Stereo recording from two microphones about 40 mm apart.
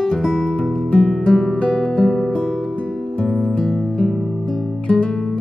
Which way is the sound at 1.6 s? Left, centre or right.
Left.